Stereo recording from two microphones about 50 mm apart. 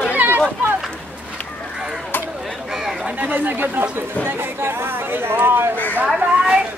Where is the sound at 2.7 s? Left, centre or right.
Centre.